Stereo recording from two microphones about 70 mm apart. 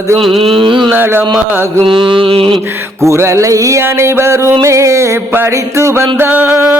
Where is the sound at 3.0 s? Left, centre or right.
Right.